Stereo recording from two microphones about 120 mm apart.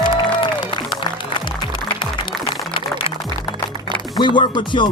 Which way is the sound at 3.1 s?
55° left (ahead or behind).